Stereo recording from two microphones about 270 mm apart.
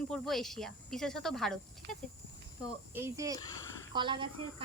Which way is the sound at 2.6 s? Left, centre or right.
Centre.